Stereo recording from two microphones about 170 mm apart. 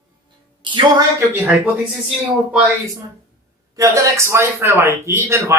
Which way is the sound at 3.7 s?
15° right (ahead or behind).